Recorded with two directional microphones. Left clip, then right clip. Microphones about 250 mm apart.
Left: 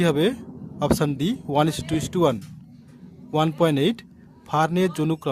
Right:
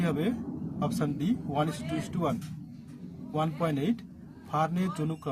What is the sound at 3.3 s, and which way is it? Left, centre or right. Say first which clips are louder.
Speech: left 10 dB; left.